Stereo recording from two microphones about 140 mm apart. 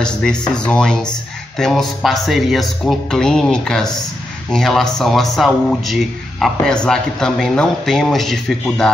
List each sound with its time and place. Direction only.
0.0 s speech: 5° left (ahead or behind)